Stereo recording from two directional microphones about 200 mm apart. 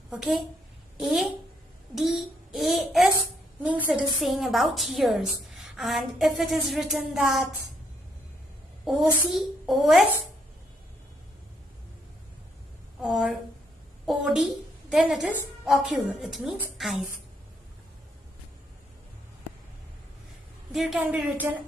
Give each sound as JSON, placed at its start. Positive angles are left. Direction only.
{"t": 0.1, "sound": "a woman's voice", "side_deg": 0}
{"t": 8.8, "sound": "a woman's voice", "side_deg": 0}
{"t": 13.0, "sound": "a woman's voice", "side_deg": 0}
{"t": 20.7, "sound": "speech", "side_deg": 0}